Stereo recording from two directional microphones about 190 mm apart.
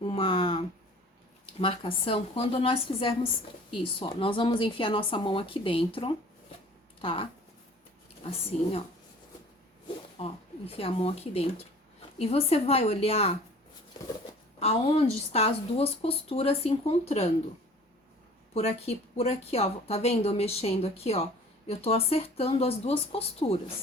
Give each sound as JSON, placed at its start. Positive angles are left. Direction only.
{"t": 0.1, "sound": "a sound", "side_deg": 25}
{"t": 1.5, "sound": "speech", "side_deg": 30}
{"t": 10.2, "sound": "a woman's voice", "side_deg": 30}
{"t": 14.6, "sound": "a woman's voice", "side_deg": 35}
{"t": 18.5, "sound": "a woman's voice", "side_deg": 35}